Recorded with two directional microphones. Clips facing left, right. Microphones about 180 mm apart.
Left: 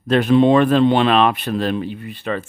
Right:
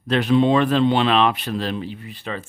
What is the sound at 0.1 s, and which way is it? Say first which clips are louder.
Speech: left 4 dB; 50° left (ahead or behind).